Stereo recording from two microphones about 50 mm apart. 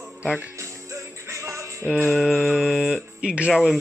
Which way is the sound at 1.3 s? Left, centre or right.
Right.